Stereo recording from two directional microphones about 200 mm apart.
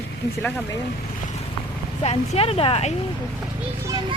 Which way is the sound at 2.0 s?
30° left (ahead or behind).